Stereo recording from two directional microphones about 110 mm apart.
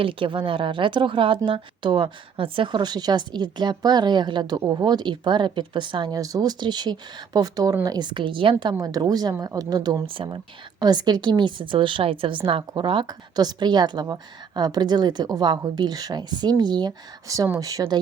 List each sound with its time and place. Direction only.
0.0 s speech: 55° right (ahead or behind)
2.8 s a woman's voice: 40° right (ahead or behind)